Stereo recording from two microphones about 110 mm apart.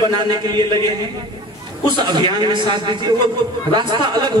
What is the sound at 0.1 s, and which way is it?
Speech, 45° right (ahead or behind).